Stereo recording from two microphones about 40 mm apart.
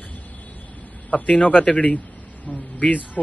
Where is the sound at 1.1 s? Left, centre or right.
Left.